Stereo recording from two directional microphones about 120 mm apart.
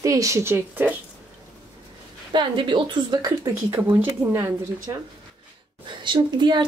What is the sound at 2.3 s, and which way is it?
A woman's voice, 40° right (ahead or behind).